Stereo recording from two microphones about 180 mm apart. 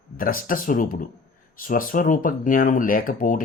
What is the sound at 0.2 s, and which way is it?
Speech, 50° left (ahead or behind).